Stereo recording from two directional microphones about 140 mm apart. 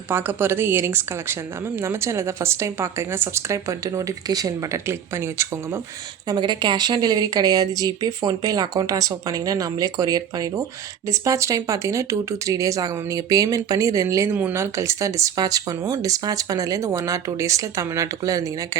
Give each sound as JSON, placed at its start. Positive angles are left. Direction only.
{"t": 0.1, "sound": "a woman's voice", "side_deg": -15}
{"t": 6.2, "sound": "a woman's voice", "side_deg": -30}